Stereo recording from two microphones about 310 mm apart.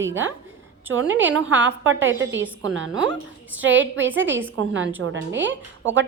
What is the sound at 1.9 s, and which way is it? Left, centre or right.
A woman's voice, right.